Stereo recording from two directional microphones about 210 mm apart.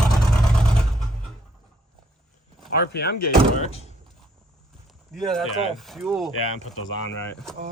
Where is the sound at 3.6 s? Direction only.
30° left (ahead or behind).